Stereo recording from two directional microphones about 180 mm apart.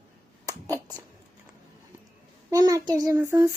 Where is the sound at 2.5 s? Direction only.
20° right (ahead or behind).